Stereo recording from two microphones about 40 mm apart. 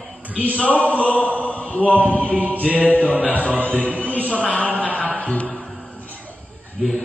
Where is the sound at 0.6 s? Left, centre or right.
Left.